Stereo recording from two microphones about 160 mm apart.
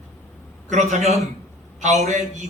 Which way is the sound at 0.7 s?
45° right (ahead or behind).